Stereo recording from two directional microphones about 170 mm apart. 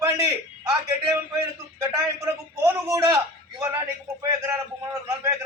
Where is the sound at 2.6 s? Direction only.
15° right (ahead or behind).